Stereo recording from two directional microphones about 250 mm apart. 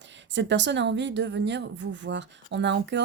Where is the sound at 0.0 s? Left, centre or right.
Right.